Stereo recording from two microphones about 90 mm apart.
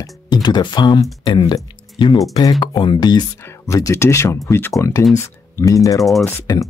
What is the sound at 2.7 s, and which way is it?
Speech, 55° left (ahead or behind).